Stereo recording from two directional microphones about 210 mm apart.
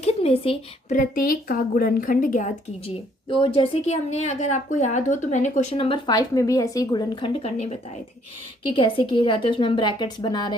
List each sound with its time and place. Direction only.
0.0 s a woman's voice: 30° left (ahead or behind)